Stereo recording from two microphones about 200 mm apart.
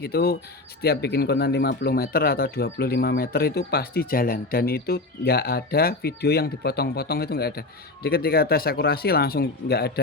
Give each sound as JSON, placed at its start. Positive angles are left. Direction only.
{"t": 0.0, "sound": "speech", "side_deg": 50}